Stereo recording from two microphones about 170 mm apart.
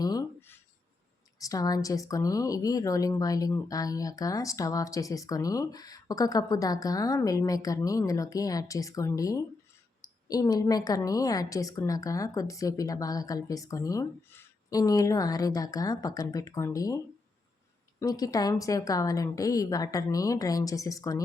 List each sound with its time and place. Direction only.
0.0 s writing: 20° left (ahead or behind)
1.4 s speech: 20° left (ahead or behind)
18.0 s speech: 20° left (ahead or behind)